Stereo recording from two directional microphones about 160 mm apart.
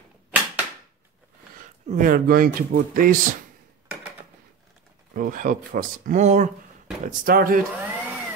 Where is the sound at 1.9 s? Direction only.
60° right (ahead or behind).